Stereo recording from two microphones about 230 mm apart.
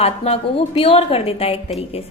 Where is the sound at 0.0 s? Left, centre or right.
Left.